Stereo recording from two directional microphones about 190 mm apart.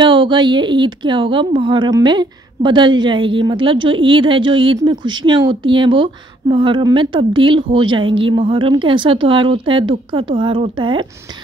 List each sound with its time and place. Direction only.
0.0 s speech: 25° right (ahead or behind)